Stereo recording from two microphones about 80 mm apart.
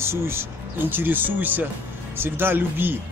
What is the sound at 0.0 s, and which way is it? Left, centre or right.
Speech, right.